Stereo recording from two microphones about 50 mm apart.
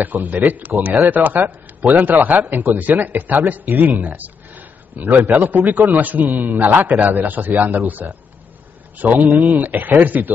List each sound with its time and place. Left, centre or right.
0.0 s a man's voice: right
4.0 s a sound: right
5.3 s a man's voice: right
9.3 s speech: centre
9.6 s a man's voice: right